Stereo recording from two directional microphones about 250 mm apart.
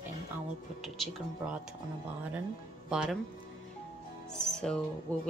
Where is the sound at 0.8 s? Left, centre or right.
Centre.